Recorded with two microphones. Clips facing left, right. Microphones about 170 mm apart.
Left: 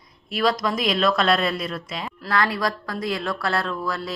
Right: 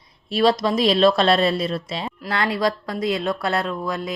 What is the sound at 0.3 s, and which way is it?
Speech, 30° right (ahead or behind).